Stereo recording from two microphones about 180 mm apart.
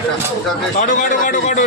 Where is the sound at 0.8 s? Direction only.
45° left (ahead or behind).